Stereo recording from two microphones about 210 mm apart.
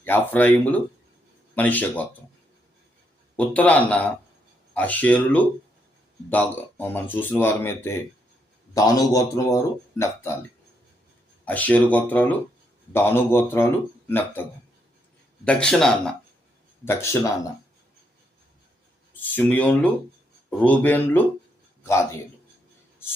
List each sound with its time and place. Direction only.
0.0 s speech: 10° left (ahead or behind)
3.3 s speech: 5° left (ahead or behind)
11.4 s speech: 5° left (ahead or behind)
15.4 s speech: 5° left (ahead or behind)
19.2 s speech: 10° left (ahead or behind)